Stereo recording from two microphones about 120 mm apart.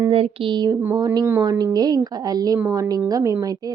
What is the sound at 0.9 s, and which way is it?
Speech, 30° right (ahead or behind).